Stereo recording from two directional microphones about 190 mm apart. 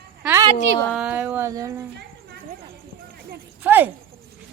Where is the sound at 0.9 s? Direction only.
5° right (ahead or behind).